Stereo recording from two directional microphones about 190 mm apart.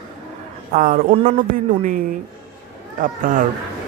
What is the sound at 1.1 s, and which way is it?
Speech, 30° right (ahead or behind).